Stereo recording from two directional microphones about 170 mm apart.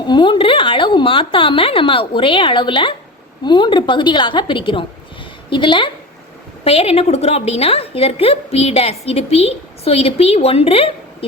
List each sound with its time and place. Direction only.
0.1 s a woman's voice: 30° left (ahead or behind)